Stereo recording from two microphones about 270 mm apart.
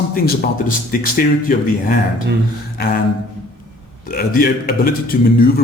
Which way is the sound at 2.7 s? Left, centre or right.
Left.